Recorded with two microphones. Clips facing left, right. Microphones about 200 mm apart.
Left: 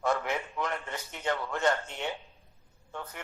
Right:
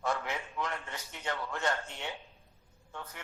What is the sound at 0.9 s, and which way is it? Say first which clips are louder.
Speech: left 5 dB; 55° left (ahead or behind).